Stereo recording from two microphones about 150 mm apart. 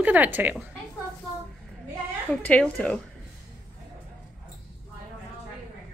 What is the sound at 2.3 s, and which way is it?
Speech, 10° left (ahead or behind).